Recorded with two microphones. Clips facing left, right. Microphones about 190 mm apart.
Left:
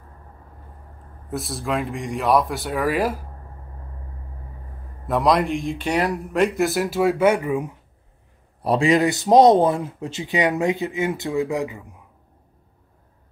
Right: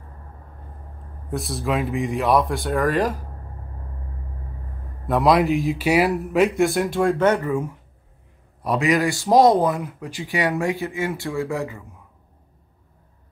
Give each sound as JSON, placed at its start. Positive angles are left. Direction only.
{"t": 1.3, "sound": "speech", "side_deg": 0}
{"t": 5.0, "sound": "speech", "side_deg": 0}
{"t": 8.6, "sound": "speech", "side_deg": 30}